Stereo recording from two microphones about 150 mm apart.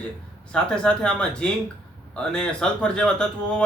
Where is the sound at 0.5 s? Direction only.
5° left (ahead or behind).